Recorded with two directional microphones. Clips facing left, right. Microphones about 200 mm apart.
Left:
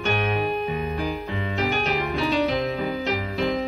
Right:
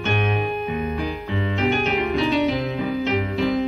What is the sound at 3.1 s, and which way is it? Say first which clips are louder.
Music: right 3 dB; centre (ahead or behind).